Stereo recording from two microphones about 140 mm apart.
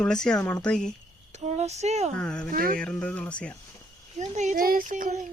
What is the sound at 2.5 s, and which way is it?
Speech, 90° right.